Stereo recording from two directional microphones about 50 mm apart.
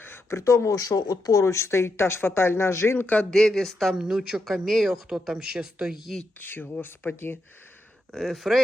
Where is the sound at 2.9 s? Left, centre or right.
Left.